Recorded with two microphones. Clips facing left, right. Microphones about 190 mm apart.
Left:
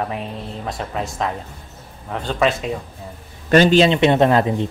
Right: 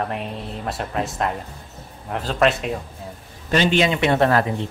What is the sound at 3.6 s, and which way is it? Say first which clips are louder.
Speech: left 5 dB; 30° left (ahead or behind).